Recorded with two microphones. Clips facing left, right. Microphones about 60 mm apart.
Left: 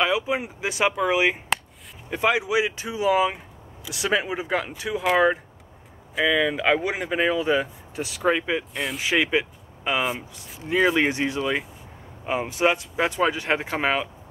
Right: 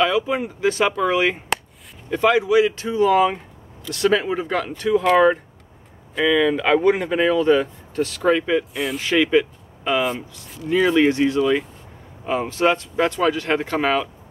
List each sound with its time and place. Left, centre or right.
0.0 s speech: centre
8.7 s speech: centre
9.0 s speech: centre